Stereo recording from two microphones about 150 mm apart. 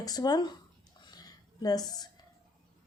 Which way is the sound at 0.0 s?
25° left (ahead or behind).